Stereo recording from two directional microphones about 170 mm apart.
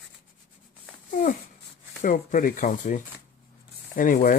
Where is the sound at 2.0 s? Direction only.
50° left (ahead or behind).